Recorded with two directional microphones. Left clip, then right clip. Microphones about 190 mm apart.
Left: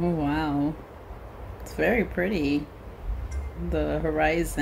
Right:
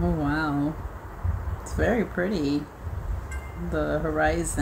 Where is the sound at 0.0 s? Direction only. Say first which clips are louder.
Even; 5° right (ahead or behind).